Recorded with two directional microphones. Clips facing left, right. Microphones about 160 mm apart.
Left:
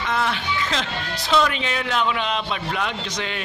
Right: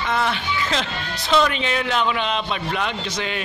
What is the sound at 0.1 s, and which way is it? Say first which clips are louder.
Speech: right 1 dB; centre (ahead or behind).